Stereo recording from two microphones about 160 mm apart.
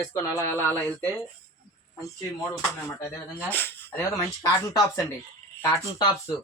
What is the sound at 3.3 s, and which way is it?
Speech, 10° left (ahead or behind).